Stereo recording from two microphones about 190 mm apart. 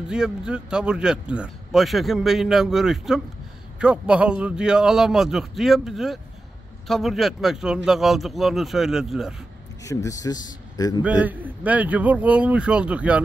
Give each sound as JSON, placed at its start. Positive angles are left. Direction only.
{"t": 0.1, "sound": "speech", "side_deg": -5}
{"t": 9.8, "sound": "speech", "side_deg": 15}
{"t": 11.0, "sound": "a man's voice", "side_deg": -5}